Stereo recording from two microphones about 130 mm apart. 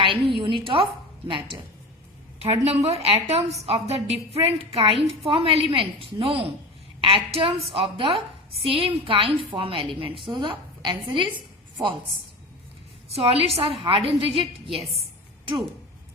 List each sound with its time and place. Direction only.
0.0 s a woman's voice: 40° right (ahead or behind)
2.4 s a woman's voice: 50° right (ahead or behind); by 11.3 s 35° right (ahead or behind)
13.1 s a woman's voice: 50° right (ahead or behind)